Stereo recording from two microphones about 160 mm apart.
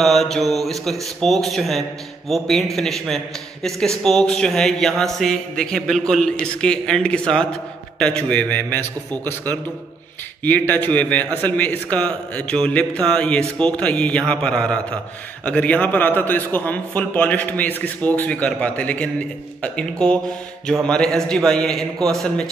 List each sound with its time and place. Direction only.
0.0 s a man's voice: centre (ahead or behind)
9.1 s a man's voice: 25° right (ahead or behind)
10.4 s a man's voice: 10° left (ahead or behind)